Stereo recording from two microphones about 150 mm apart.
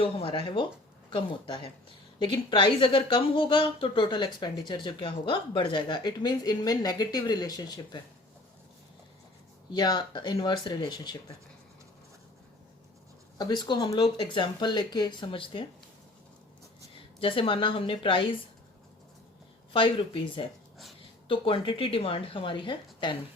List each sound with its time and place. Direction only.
0.0 s a woman's voice: 35° left (ahead or behind)
9.7 s a woman's voice: 30° left (ahead or behind)
13.4 s a woman's voice: 30° left (ahead or behind)
17.2 s a woman's voice: 35° left (ahead or behind)
19.7 s a woman's voice: 35° left (ahead or behind)